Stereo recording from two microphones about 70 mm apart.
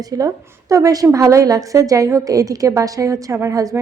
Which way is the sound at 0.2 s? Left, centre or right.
Right.